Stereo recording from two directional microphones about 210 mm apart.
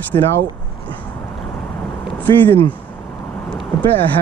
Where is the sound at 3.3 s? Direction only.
5° left (ahead or behind).